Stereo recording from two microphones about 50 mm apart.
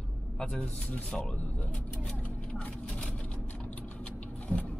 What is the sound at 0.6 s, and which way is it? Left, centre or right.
Speech, left.